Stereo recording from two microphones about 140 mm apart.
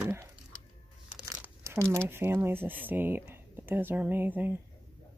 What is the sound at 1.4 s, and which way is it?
Crumpling, 15° right (ahead or behind).